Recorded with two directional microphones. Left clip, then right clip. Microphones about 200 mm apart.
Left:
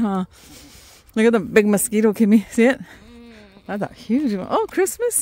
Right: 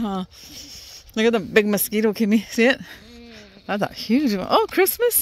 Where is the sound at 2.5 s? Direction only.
15° left (ahead or behind).